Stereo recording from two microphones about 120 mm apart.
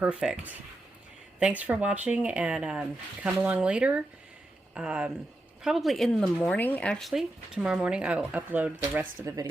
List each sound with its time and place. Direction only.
0.0 s speech: 5° right (ahead or behind)
9.2 s speech: 30° right (ahead or behind)